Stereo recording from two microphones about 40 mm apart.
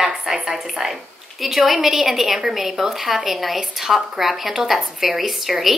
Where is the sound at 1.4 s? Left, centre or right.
Centre.